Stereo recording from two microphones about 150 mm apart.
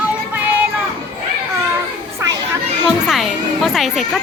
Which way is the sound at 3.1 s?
Centre (ahead or behind).